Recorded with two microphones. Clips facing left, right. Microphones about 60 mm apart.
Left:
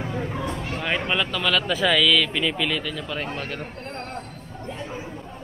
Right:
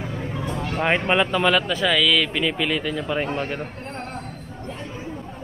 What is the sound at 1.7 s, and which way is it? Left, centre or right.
Speech, centre.